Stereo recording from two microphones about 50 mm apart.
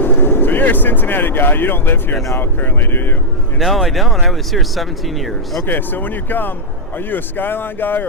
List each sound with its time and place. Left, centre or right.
0.0 s speech: left
3.6 s speech: centre
5.6 s speech: left